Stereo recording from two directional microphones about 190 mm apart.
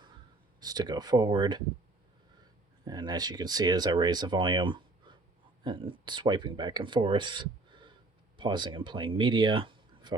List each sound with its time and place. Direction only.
0.6 s speech: 20° right (ahead or behind)
2.8 s speech: 20° right (ahead or behind)